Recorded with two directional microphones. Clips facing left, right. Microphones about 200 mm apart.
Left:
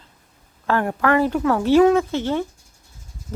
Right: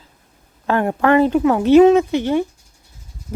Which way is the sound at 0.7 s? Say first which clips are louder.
Right 4 dB; 20° right (ahead or behind).